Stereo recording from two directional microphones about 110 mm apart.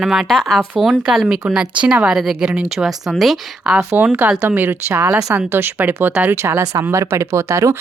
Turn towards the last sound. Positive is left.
turn(degrees=-25)  # may be behind; listen again after turning